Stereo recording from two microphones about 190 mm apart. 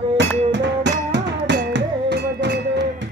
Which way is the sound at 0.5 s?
70° right (ahead or behind).